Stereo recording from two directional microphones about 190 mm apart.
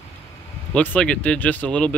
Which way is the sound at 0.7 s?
5° left (ahead or behind).